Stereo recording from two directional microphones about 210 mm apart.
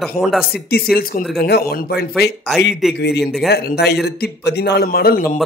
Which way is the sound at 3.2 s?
Centre (ahead or behind).